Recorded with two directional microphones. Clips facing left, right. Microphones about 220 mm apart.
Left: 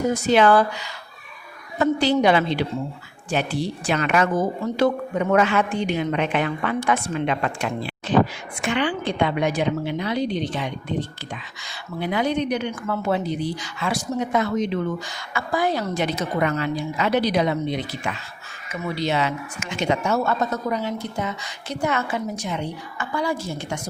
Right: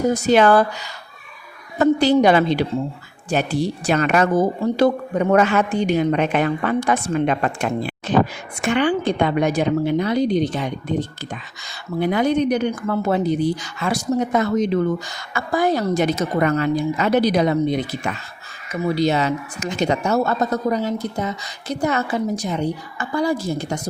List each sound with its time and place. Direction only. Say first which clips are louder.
0.1 s speech: right 2 dB; 45° right (ahead or behind)